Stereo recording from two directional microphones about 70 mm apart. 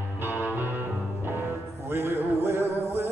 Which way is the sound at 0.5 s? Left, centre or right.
Right.